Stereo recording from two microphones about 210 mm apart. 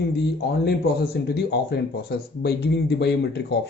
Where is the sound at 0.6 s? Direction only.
50° left (ahead or behind).